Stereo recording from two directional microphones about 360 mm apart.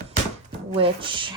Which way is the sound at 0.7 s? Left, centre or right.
Centre.